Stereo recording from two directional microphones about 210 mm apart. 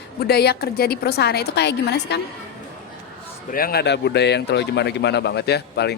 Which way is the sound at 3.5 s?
45° left (ahead or behind).